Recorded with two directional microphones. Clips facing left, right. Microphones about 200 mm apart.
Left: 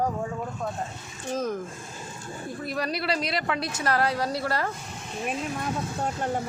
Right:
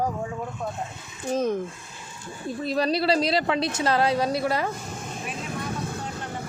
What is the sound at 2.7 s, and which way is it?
Speech, 30° right (ahead or behind).